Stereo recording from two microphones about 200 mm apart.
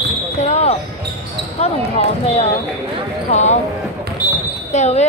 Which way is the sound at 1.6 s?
30° left (ahead or behind).